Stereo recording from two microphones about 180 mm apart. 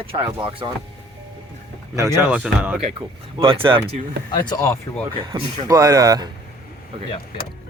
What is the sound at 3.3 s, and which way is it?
Speech, 30° right (ahead or behind).